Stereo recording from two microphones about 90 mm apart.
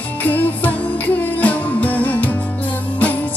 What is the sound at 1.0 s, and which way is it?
Music, 15° left (ahead or behind).